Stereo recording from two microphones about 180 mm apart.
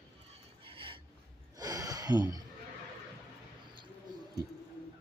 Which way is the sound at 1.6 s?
20° right (ahead or behind).